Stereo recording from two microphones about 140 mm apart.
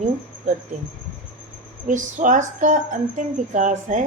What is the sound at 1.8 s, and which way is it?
A woman's voice, 65° right (ahead or behind).